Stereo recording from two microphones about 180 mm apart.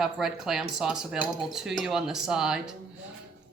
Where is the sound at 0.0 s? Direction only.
Centre (ahead or behind).